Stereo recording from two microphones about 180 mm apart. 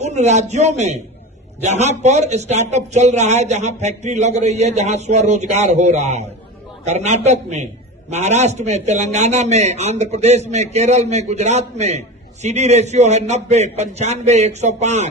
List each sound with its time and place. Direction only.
0.0 s a man's voice: 40° right (ahead or behind)